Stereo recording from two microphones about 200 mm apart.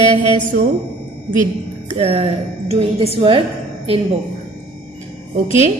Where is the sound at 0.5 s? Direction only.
40° right (ahead or behind).